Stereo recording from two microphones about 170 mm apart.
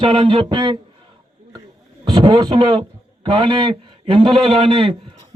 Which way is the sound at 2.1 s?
25° right (ahead or behind).